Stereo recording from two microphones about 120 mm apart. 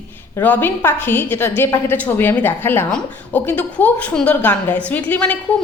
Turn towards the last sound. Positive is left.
turn(degrees=10)  # may be behind; listen again after turning